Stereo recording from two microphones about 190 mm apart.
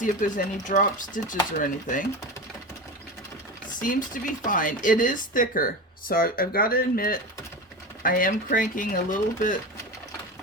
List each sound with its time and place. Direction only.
0.0 s speech: 45° left (ahead or behind)
3.8 s speech: 45° left (ahead or behind)